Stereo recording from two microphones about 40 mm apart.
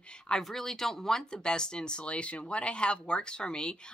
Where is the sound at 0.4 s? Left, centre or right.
Centre.